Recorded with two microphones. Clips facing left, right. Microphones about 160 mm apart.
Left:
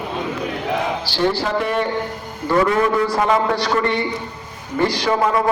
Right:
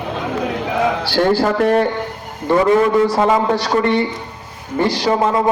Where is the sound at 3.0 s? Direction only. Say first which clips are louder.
Right 3 dB; 25° right (ahead or behind).